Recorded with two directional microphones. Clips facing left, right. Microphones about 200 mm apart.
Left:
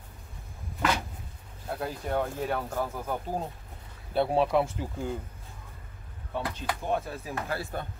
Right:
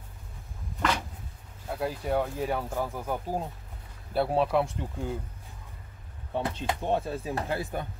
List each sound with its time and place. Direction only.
1.7 s speech: 5° right (ahead or behind)
6.3 s speech: 25° right (ahead or behind)